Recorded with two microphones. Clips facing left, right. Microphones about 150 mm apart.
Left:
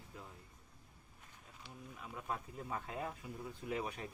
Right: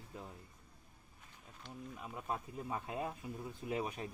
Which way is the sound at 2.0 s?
20° right (ahead or behind).